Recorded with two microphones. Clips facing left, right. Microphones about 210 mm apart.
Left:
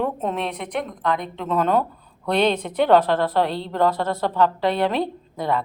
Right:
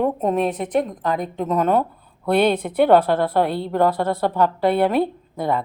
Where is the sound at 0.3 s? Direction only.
40° right (ahead or behind).